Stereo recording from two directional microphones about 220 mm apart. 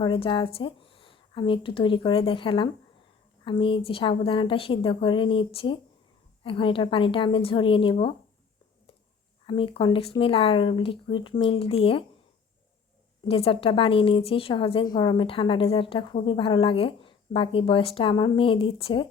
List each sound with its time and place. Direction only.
0.0 s a woman's voice: 20° left (ahead or behind)
9.5 s a woman's voice: 25° left (ahead or behind)
13.2 s a woman's voice: 25° left (ahead or behind)